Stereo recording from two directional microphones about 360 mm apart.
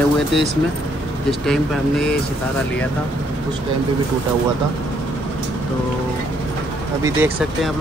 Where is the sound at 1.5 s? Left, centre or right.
Centre.